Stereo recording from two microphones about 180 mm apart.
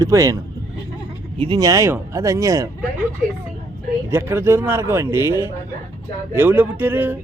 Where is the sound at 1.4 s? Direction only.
25° right (ahead or behind).